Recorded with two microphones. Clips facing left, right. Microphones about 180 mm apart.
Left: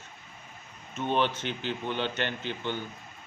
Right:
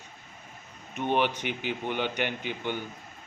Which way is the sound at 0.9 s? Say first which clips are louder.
Right 1 dB; 15° right (ahead or behind).